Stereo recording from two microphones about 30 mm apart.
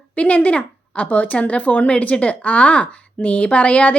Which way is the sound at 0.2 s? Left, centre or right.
Left.